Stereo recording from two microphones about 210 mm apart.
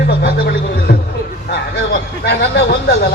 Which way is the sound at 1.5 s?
55° left (ahead or behind).